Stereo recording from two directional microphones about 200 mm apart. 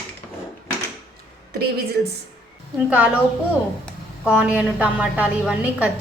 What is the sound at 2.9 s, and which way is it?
Speech, 5° right (ahead or behind).